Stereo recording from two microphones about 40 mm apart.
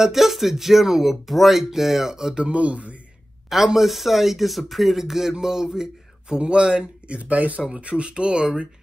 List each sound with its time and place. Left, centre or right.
0.0 s speech: centre
2.3 s speech: right
3.4 s speech: centre
5.3 s a sound: centre
6.4 s speech: right
7.6 s speech: right